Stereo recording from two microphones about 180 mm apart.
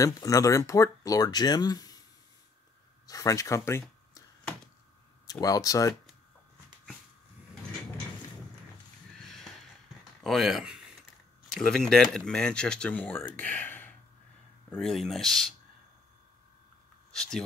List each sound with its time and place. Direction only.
0.0 s speech: 20° left (ahead or behind)
3.1 s speech: 20° left (ahead or behind)
5.2 s speech: 20° left (ahead or behind)
9.2 s a sound: centre (ahead or behind)
10.2 s speech: centre (ahead or behind)
13.4 s a sound: 10° left (ahead or behind)
14.7 s speech: centre (ahead or behind)
17.1 s speech: 5° left (ahead or behind)